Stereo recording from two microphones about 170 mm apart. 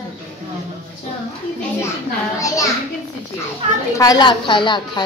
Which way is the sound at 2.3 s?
20° left (ahead or behind).